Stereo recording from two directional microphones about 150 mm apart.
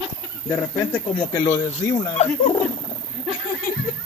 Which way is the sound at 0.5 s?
20° left (ahead or behind).